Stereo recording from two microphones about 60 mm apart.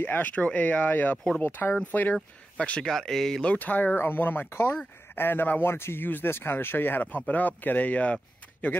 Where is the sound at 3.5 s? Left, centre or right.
Left.